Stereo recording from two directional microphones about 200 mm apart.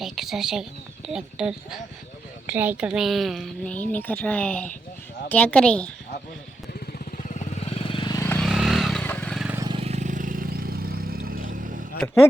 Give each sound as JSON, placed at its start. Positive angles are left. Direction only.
{"t": 0.0, "sound": "a woman's voice", "side_deg": 0}
{"t": 6.7, "sound": "vehicle", "side_deg": 40}
{"t": 8.4, "sound": "motorcycle", "side_deg": 0}
{"t": 9.4, "sound": "vehicle", "side_deg": -10}
{"t": 9.6, "sound": "vehicle", "side_deg": -30}
{"t": 11.9, "sound": "speech", "side_deg": 10}